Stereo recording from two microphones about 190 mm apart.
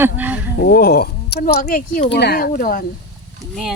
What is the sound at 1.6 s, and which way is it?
Speech, 45° left (ahead or behind).